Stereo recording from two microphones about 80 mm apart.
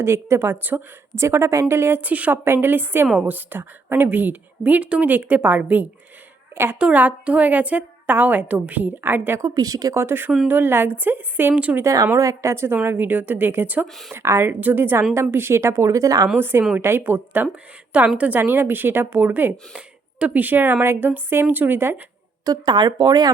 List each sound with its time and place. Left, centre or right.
0.0 s a woman's voice: right
9.4 s a woman's voice: right
9.9 s a woman's voice: right
11.8 s a woman's voice: right
13.8 s speech: centre
14.1 s a woman's voice: right
16.4 s a woman's voice: right
22.4 s speech: right